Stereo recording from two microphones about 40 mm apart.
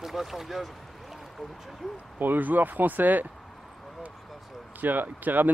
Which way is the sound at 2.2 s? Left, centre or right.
Right.